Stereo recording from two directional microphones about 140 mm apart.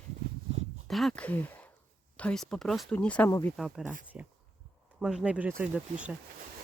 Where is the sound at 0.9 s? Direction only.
Centre (ahead or behind).